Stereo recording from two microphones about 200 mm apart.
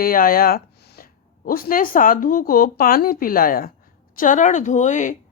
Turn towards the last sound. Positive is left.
turn(degrees=40)  # may be behind; listen again after turning